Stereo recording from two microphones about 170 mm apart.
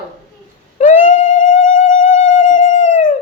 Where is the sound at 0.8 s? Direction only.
50° left (ahead or behind).